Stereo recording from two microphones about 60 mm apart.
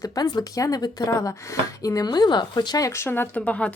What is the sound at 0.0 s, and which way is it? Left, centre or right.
Speech, left.